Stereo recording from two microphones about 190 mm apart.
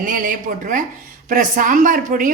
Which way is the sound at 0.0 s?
45° right (ahead or behind).